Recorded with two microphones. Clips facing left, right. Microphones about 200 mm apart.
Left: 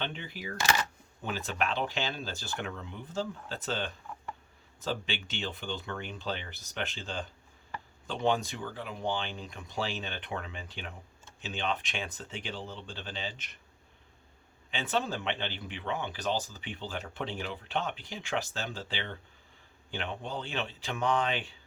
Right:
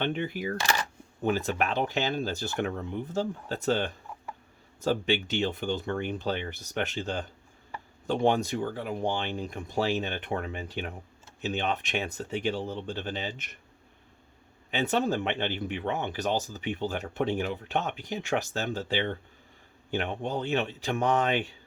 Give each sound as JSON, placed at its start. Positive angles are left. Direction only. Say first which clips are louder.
{"t": 0.0, "sound": "speech", "louder": "right 9 dB", "side_deg": -50}
{"t": 14.7, "sound": "speech", "louder": "right 6 dB", "side_deg": -55}